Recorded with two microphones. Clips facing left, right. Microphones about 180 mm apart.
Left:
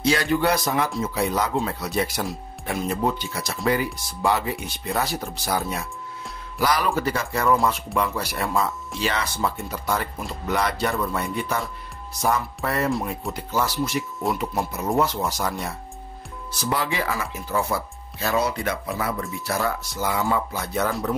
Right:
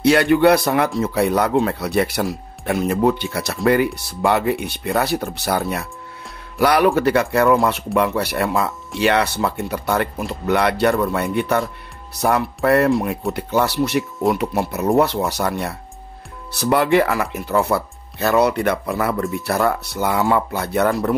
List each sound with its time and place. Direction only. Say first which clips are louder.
0.0 s speech: right 8 dB; 65° right (ahead or behind)